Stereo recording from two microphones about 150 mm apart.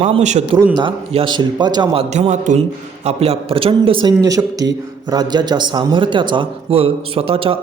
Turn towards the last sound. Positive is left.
turn(degrees=-40)  # may be behind; listen again after turning